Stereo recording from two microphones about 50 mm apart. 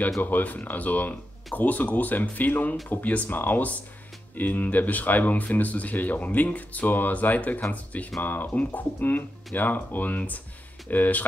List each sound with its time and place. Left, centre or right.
0.2 s speech: left